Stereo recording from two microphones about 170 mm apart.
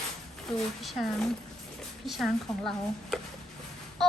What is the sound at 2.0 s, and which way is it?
A child's voice, centre (ahead or behind).